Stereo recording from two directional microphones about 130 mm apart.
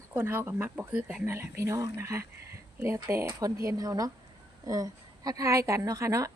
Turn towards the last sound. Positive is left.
turn(degrees=-25)  # may be behind; listen again after turning